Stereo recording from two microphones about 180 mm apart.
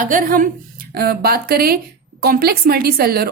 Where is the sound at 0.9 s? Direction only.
60° right (ahead or behind).